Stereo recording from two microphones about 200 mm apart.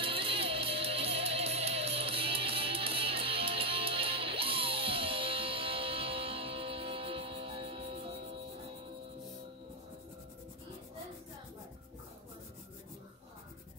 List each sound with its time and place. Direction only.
0.0 s music: 25° right (ahead or behind)